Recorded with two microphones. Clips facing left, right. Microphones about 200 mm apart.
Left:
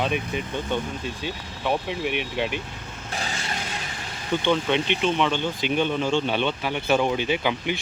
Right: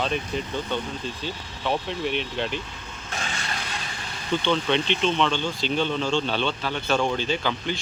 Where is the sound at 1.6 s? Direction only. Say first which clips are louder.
Left 1 dB; 10° left (ahead or behind).